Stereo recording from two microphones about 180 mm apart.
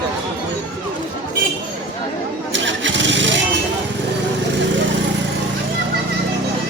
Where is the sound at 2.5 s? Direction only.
90° right.